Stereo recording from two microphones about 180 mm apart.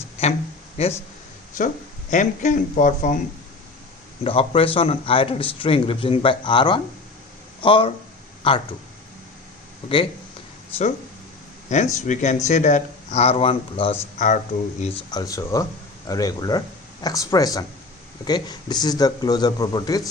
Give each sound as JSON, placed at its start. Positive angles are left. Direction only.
{"t": 0.8, "sound": "speech", "side_deg": 35}
{"t": 4.2, "sound": "speech", "side_deg": 30}
{"t": 11.9, "sound": "speech", "side_deg": 40}
{"t": 14.2, "sound": "speech", "side_deg": 45}
{"t": 15.1, "sound": "speech", "side_deg": 20}